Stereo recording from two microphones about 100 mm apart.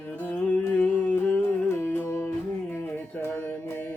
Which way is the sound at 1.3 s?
25° left (ahead or behind).